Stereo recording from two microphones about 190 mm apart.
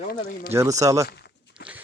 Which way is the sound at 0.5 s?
15° right (ahead or behind).